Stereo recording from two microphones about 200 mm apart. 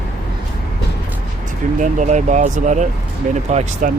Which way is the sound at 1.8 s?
35° right (ahead or behind).